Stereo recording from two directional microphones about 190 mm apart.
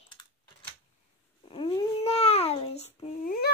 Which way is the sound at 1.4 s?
30° left (ahead or behind).